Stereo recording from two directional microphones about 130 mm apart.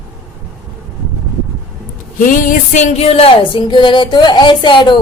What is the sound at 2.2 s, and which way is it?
Music, 90° left.